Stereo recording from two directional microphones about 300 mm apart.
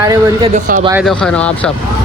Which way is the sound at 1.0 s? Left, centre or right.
Centre.